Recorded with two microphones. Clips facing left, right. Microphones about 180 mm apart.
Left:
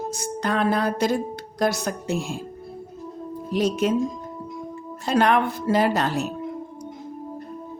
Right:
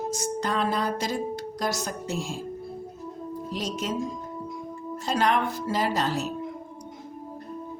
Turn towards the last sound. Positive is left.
turn(degrees=60)  # may be behind; listen again after turning